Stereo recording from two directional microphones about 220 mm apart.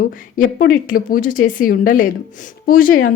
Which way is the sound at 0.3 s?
40° left (ahead or behind).